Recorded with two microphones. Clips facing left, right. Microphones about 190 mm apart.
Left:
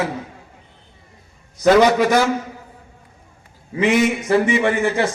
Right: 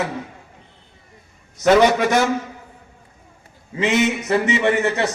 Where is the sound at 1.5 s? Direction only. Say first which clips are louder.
Left 1 dB; 25° right (ahead or behind).